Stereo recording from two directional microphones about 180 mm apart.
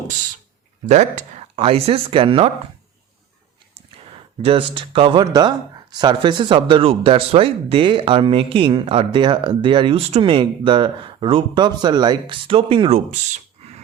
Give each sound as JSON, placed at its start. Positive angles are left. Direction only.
{"t": 0.9, "sound": "speech", "side_deg": -40}
{"t": 4.4, "sound": "speech", "side_deg": -30}